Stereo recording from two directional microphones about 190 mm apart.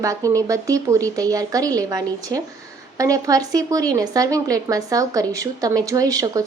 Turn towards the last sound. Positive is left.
turn(degrees=-20)  # may be behind; listen again after turning